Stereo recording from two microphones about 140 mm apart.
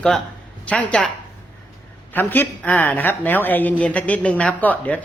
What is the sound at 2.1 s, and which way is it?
A woman's voice, 15° left (ahead or behind).